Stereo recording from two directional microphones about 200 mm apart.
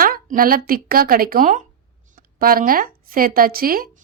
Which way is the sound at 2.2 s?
45° right (ahead or behind).